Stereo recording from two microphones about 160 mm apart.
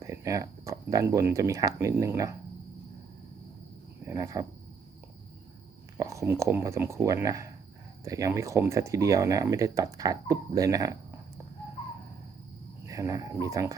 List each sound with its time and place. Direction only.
0.0 s speech: 20° right (ahead or behind)
4.0 s speech: 20° right (ahead or behind)
6.0 s speech: 20° right (ahead or behind)
12.8 s speech: 20° right (ahead or behind)